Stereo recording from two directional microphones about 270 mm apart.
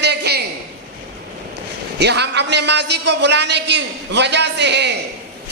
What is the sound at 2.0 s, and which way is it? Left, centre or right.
A man's voice, right.